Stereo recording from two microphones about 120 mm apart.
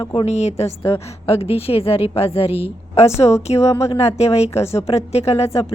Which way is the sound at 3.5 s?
45° left (ahead or behind).